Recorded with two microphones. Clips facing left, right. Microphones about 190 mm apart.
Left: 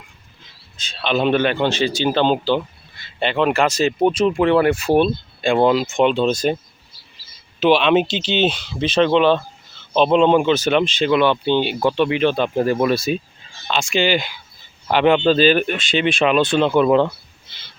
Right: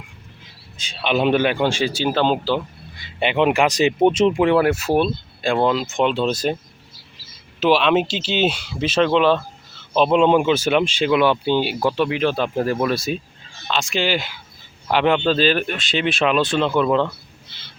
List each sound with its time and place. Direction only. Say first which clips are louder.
0.8 s speech: even; 10° right (ahead or behind)
3.0 s speech: right 1 dB; 15° right (ahead or behind)
4.4 s speech: left 1 dB; 10° right (ahead or behind)
7.6 s speech: left 2 dB; centre (ahead or behind)